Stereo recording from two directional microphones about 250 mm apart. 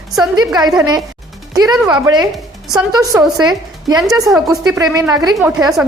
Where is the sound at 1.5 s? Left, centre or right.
Centre.